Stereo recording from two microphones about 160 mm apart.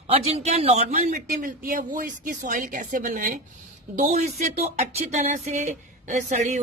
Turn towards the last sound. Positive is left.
turn(degrees=-45)  # may be behind; listen again after turning